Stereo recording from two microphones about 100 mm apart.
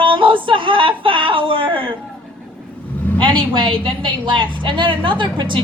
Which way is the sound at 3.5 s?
60° right (ahead or behind).